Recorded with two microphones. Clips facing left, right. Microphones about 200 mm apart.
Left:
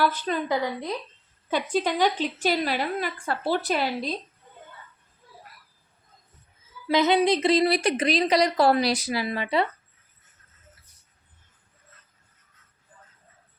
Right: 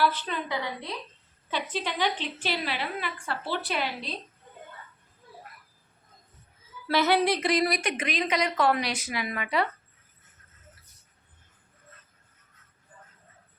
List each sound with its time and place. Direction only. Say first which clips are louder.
0.0 s a woman's voice: left 3 dB; 45° left (ahead or behind)
6.8 s speech: left 3 dB; 20° left (ahead or behind)